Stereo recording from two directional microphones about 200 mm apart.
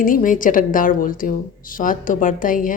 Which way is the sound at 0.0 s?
40° left (ahead or behind).